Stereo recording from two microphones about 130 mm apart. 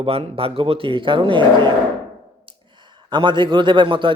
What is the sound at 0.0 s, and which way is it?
A man's voice, 45° right (ahead or behind).